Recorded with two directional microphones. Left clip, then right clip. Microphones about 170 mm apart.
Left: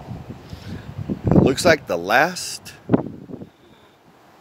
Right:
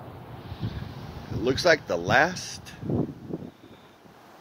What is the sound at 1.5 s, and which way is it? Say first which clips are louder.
Speech: left 1 dB; 30° left (ahead or behind).